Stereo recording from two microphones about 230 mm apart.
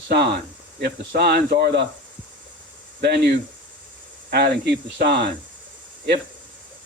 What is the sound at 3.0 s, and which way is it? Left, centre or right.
Speech, right.